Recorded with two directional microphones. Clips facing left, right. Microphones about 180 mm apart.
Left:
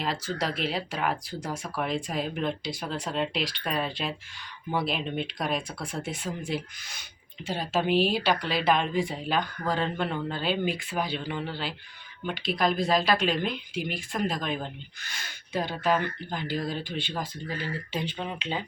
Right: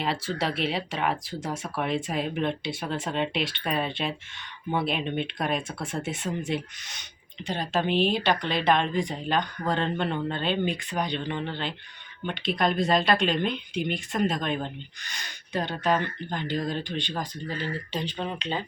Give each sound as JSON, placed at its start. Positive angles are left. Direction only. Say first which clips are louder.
{"t": 0.3, "sound": "speech", "louder": "right 2 dB", "side_deg": 0}